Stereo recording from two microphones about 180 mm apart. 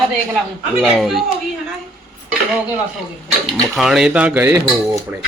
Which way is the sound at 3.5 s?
Centre (ahead or behind).